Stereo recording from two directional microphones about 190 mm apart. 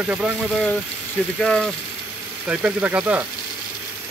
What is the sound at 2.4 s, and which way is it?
Speech, 5° right (ahead or behind).